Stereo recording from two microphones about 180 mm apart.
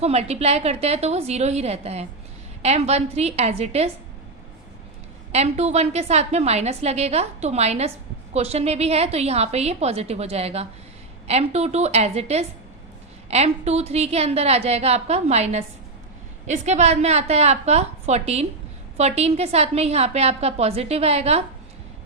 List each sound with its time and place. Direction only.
0.0 s a woman's voice: 35° right (ahead or behind)
5.3 s a woman's voice: 35° right (ahead or behind)